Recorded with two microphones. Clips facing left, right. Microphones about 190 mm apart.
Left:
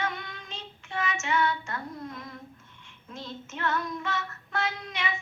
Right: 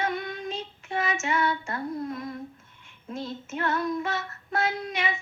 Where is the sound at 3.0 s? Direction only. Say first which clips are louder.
Right 6 dB; 35° right (ahead or behind).